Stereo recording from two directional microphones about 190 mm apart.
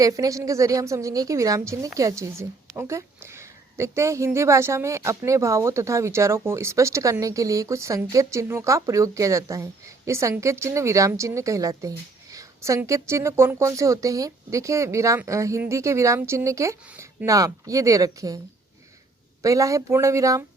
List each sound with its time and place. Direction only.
0.0 s a woman's voice: 15° right (ahead or behind)
19.4 s a woman's voice: 15° right (ahead or behind)